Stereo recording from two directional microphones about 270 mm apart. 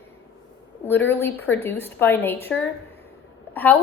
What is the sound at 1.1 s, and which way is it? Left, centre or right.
A woman's voice, centre.